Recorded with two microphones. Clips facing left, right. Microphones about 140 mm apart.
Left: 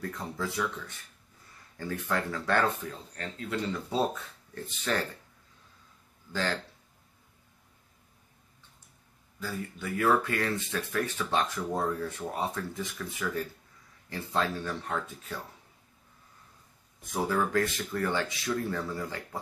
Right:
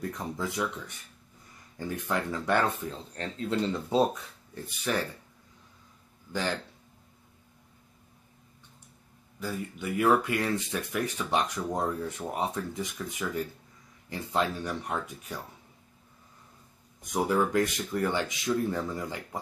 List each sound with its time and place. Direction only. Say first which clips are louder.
0.1 s speech: right 1 dB; 20° right (ahead or behind)
4.6 s speech: right 1 dB; 10° right (ahead or behind)
6.3 s speech: right 1 dB; 15° right (ahead or behind)
9.4 s speech: right 2 dB; 20° right (ahead or behind)
17.0 s speech: right 3 dB; 20° right (ahead or behind)